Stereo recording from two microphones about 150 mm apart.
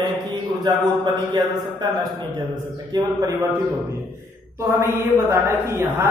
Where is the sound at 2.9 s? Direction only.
25° right (ahead or behind).